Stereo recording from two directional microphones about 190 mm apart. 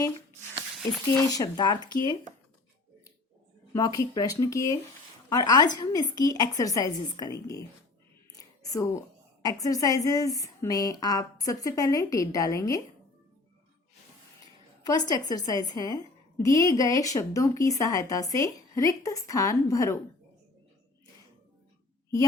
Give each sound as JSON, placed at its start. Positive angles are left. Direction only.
{"t": 1.1, "sound": "a woman's voice", "side_deg": 20}
{"t": 3.7, "sound": "a woman's voice", "side_deg": 20}
{"t": 8.4, "sound": "a sound", "side_deg": 20}
{"t": 9.4, "sound": "a woman's voice", "side_deg": 20}
{"t": 14.8, "sound": "a woman's voice", "side_deg": 20}